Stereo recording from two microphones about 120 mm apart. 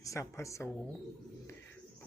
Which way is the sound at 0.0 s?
25° left (ahead or behind).